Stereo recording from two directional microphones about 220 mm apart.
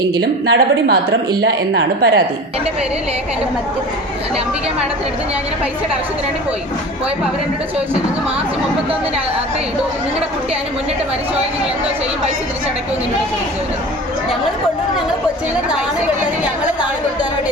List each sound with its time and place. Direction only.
0.2 s a woman's voice: 50° right (ahead or behind)